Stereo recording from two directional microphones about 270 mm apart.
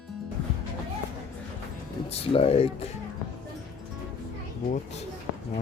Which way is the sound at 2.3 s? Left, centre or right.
Left.